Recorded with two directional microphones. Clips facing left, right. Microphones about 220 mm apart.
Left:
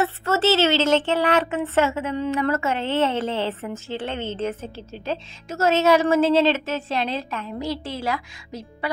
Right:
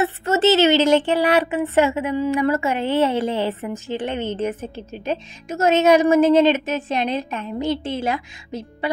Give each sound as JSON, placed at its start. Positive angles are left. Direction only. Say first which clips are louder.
{"t": 0.0, "sound": "a woman's voice", "louder": "right 3 dB", "side_deg": -15}